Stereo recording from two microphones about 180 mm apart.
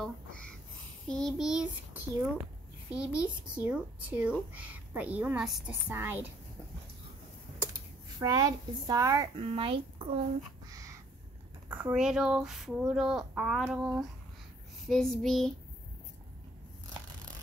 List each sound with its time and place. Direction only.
1.0 s speech: 5° left (ahead or behind)
2.9 s a child's voice: 5° right (ahead or behind)
8.2 s speech: 20° right (ahead or behind)
9.4 s speech: 30° right (ahead or behind)
10.7 s crow: 20° right (ahead or behind)
11.7 s speech: 5° right (ahead or behind)